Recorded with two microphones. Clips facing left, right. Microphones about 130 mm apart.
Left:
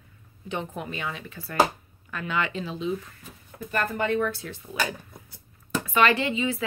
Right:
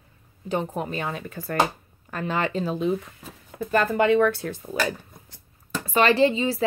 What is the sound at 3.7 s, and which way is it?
Speech, 90° right.